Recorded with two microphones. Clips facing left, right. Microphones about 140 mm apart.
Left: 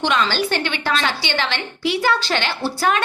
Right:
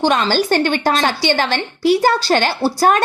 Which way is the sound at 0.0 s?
40° right (ahead or behind).